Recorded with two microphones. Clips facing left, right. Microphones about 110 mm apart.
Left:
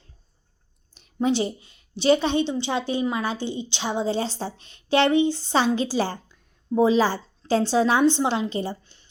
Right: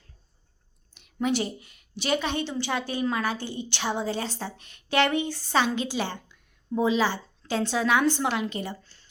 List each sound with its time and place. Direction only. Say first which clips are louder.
0.9 s a woman's voice: left 4 dB; 35° left (ahead or behind)
8.8 s a woman's voice: even; 20° left (ahead or behind)